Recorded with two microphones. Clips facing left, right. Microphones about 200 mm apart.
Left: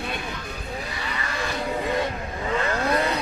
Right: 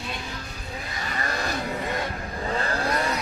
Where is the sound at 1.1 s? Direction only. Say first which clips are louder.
Right 2 dB; 40° right (ahead or behind).